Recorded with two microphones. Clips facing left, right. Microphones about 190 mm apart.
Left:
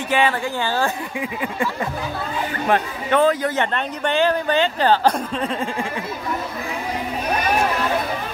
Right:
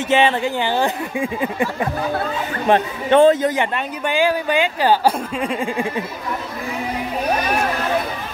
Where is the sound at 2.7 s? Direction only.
25° right (ahead or behind).